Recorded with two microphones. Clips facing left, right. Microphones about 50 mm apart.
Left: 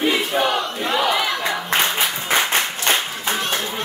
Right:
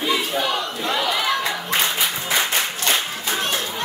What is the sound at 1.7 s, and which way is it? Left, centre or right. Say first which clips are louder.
Clapping: left 3 dB; left.